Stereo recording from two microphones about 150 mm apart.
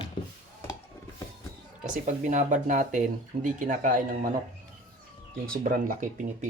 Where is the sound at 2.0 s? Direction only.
55° right (ahead or behind).